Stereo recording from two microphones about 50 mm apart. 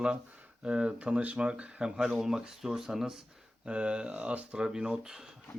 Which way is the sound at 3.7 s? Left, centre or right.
Right.